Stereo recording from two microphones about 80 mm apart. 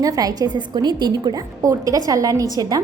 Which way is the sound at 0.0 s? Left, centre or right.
Right.